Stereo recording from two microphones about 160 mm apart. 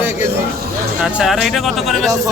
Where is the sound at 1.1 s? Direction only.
Centre (ahead or behind).